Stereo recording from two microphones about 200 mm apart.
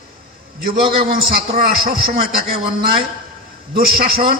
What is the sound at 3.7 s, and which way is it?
Speech, 45° right (ahead or behind).